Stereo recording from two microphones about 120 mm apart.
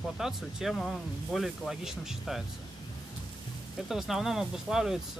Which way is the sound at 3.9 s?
5° right (ahead or behind).